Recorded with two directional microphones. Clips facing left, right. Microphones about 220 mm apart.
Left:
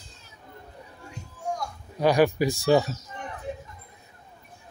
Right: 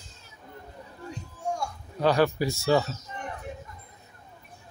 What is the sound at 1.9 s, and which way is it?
Speech, 15° left (ahead or behind).